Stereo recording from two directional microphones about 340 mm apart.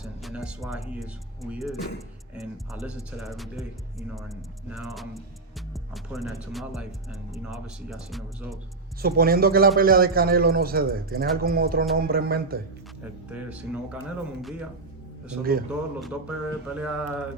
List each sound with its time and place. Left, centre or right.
0.0 s speech: centre
9.0 s a man's voice: right
13.3 s speech: centre
16.0 s speech: centre